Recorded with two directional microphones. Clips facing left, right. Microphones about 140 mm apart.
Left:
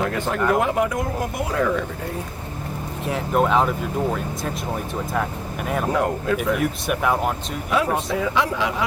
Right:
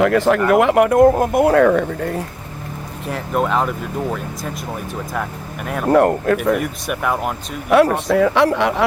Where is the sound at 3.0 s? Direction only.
Centre (ahead or behind).